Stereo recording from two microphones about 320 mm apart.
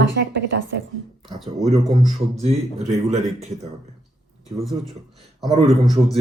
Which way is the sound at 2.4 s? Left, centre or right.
Centre.